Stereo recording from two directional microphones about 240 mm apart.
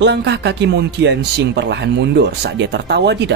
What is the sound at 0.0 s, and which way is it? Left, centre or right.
Speech, right.